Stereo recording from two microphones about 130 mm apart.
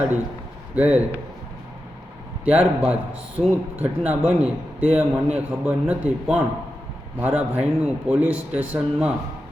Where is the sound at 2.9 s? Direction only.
10° right (ahead or behind).